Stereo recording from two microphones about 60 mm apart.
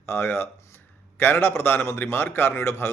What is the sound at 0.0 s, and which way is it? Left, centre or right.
A man's voice, left.